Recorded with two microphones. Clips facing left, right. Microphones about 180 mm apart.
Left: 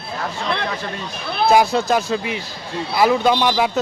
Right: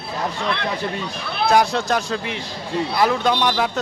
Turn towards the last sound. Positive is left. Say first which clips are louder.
# left 3 dB
turn(degrees=5)  # may be behind; listen again after turning